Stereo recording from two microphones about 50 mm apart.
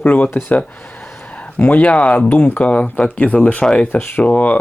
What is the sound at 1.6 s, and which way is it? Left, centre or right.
Speech, left.